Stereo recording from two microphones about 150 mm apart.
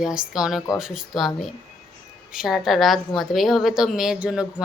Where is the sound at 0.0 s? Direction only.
5° right (ahead or behind).